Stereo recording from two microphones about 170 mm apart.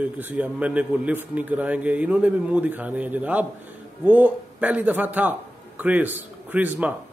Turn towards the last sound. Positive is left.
turn(degrees=-10)  # may be behind; listen again after turning